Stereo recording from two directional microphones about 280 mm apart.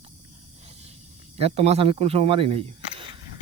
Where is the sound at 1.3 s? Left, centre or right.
Right.